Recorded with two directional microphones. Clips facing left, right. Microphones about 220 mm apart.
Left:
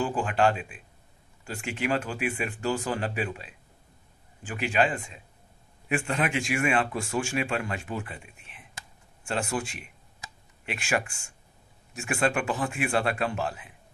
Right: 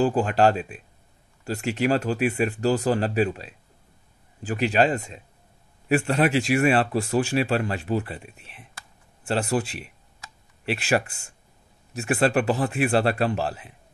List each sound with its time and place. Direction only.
0.0 s speech: 40° right (ahead or behind)